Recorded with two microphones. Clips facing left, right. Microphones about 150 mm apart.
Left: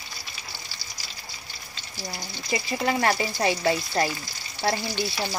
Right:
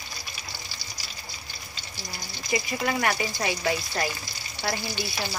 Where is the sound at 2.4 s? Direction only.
30° left (ahead or behind).